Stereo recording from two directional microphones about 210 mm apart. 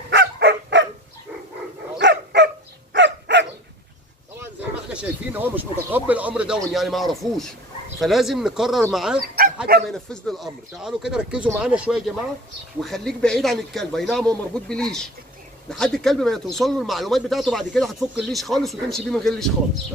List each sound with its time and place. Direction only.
0.1 s dog: 55° right (ahead or behind)
2.0 s dog: 55° right (ahead or behind)
4.4 s speech: 5° right (ahead or behind)
9.2 s dog: 45° right (ahead or behind)
9.8 s speech: centre (ahead or behind)